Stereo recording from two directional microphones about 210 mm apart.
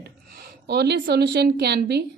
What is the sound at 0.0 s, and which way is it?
A woman's voice, 50° right (ahead or behind).